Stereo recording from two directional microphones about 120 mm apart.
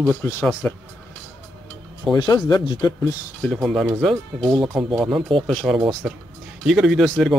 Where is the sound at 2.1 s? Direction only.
30° left (ahead or behind).